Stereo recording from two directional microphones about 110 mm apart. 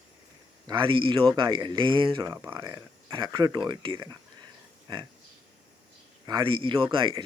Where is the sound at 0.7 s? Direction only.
50° right (ahead or behind).